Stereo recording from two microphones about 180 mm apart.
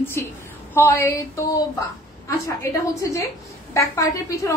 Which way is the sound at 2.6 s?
15° left (ahead or behind).